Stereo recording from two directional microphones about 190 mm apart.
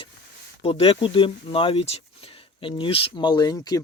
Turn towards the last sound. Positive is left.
turn(degrees=20)  # may be behind; listen again after turning